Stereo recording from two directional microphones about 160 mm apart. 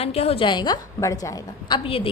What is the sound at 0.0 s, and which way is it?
A woman's voice, 40° left (ahead or behind).